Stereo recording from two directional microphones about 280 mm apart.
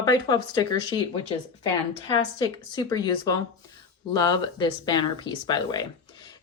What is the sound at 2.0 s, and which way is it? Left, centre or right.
A woman's voice, centre.